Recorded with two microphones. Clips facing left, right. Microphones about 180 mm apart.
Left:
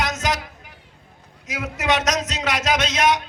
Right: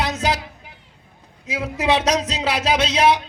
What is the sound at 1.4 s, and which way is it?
A man's voice, 30° right (ahead or behind).